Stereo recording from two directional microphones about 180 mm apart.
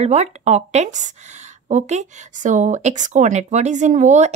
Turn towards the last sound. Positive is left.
turn(degrees=-40)  # may be behind; listen again after turning